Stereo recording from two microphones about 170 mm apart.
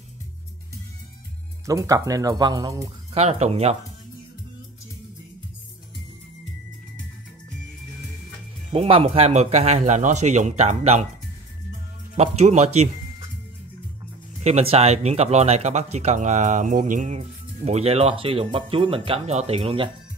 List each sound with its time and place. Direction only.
1.7 s speech: 20° right (ahead or behind)
3.2 s speech: 40° right (ahead or behind)
8.7 s speech: 35° right (ahead or behind)
12.2 s speech: 40° right (ahead or behind)
14.4 s speech: 35° right (ahead or behind)
17.6 s speech: 35° right (ahead or behind)